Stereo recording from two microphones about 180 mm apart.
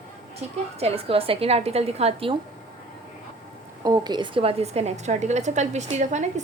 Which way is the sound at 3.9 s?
25° right (ahead or behind).